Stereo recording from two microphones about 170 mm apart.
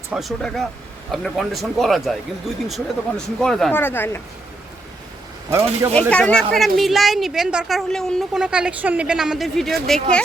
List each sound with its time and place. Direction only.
0.1 s a woman's voice: centre (ahead or behind)
5.5 s speech: 15° right (ahead or behind)
6.0 s a woman's voice: 5° left (ahead or behind)